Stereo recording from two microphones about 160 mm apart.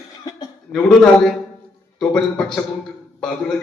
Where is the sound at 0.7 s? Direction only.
5° left (ahead or behind).